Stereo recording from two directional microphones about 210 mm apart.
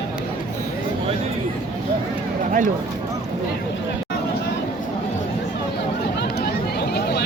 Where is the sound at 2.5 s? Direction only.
40° right (ahead or behind).